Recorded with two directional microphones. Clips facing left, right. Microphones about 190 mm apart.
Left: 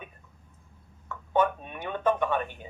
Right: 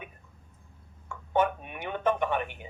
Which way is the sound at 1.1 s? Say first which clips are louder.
Left 1 dB; 15° right (ahead or behind).